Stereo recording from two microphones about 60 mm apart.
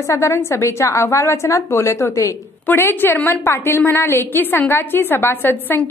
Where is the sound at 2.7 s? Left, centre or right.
Left.